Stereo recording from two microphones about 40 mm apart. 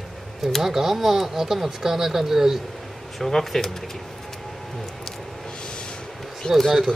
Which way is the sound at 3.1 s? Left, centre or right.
Centre.